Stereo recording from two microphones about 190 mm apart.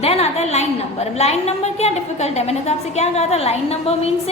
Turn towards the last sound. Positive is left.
turn(degrees=30)  # may be behind; listen again after turning